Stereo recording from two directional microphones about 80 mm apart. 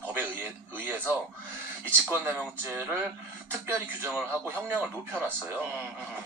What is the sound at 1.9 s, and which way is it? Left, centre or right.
Speech, right.